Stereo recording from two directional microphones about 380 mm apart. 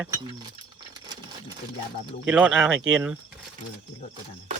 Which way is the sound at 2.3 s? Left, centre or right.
Centre.